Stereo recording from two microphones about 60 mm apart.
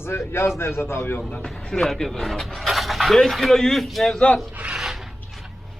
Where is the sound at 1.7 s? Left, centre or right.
Centre.